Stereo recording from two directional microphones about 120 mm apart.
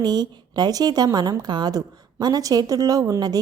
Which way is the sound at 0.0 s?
35° right (ahead or behind).